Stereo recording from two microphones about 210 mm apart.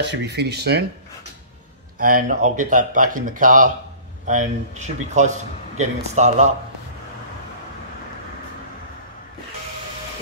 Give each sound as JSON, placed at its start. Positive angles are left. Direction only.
{"t": 0.0, "sound": "speech", "side_deg": -55}
{"t": 2.0, "sound": "speech", "side_deg": -40}